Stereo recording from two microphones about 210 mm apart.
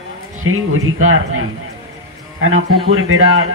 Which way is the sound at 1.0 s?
75° right (ahead or behind).